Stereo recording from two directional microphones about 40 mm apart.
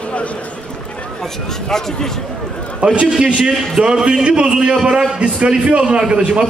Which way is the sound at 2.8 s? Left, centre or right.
Right.